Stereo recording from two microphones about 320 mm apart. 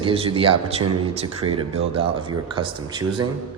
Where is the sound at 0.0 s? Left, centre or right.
Centre.